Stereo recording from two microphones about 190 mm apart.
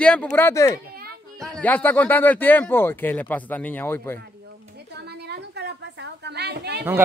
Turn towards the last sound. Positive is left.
turn(degrees=-60)  # may be behind; listen again after turning